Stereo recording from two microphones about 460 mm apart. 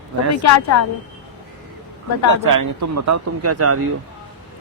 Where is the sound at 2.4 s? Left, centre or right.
Right.